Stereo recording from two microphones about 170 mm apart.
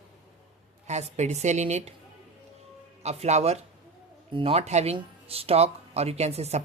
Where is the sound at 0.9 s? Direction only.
40° right (ahead or behind).